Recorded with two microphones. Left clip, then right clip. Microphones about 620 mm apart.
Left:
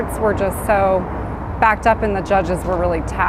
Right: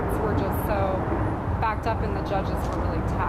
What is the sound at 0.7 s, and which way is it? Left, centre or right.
A woman's voice, left.